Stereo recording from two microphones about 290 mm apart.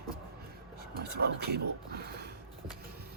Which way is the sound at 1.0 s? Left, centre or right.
Right.